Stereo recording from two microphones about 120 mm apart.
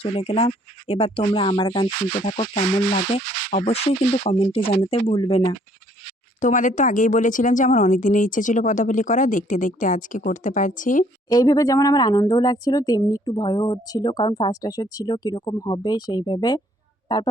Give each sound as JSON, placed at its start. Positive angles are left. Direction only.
{"t": 0.0, "sound": "speech", "side_deg": 55}
{"t": 2.2, "sound": "speech", "side_deg": 60}
{"t": 6.4, "sound": "speech", "side_deg": 90}
{"t": 11.3, "sound": "speech", "side_deg": 30}